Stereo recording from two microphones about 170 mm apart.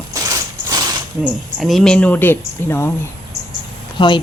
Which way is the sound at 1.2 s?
Centre (ahead or behind).